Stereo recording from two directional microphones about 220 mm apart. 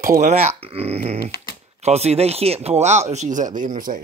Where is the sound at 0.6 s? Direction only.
25° right (ahead or behind).